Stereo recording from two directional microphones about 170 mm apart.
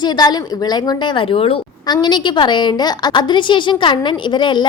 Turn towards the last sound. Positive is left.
turn(degrees=25)  # may be behind; listen again after turning